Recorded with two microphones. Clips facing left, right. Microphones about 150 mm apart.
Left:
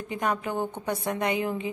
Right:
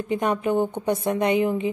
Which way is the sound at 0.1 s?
25° right (ahead or behind).